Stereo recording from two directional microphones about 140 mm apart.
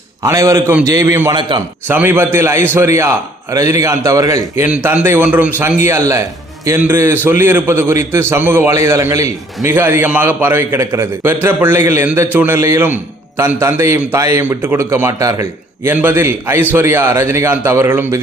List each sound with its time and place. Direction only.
0.2 s a man's voice: 20° right (ahead or behind)
1.4 s a man's voice: 35° right (ahead or behind)
1.9 s a man's voice: 15° right (ahead or behind)